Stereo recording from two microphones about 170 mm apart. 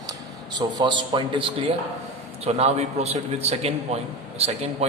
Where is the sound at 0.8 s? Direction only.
25° right (ahead or behind).